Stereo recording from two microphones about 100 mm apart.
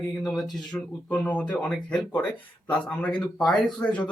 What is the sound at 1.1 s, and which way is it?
Speech, 15° left (ahead or behind).